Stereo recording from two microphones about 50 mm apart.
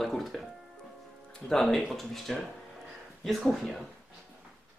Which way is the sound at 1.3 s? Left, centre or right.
Centre.